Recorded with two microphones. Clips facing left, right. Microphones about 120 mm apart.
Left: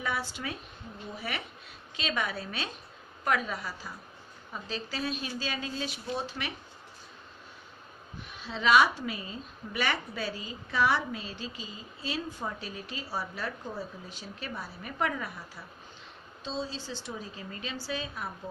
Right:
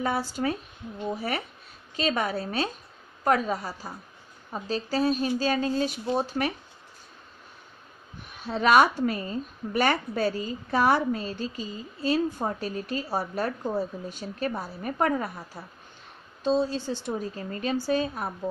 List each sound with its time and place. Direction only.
0.0 s speech: 40° right (ahead or behind)
2.0 s a woman's voice: 40° right (ahead or behind)
8.4 s a woman's voice: 50° right (ahead or behind)
16.4 s a woman's voice: 55° right (ahead or behind)